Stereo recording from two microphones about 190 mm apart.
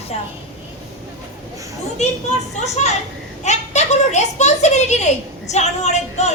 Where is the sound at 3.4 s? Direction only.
35° left (ahead or behind).